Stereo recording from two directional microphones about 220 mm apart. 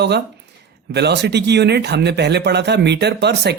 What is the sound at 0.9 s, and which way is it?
Speech, 50° right (ahead or behind).